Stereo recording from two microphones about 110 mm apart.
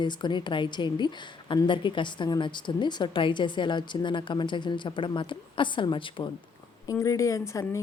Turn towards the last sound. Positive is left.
turn(degrees=30)  # may be behind; listen again after turning